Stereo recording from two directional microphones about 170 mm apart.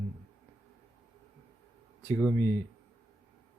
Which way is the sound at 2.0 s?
15° left (ahead or behind).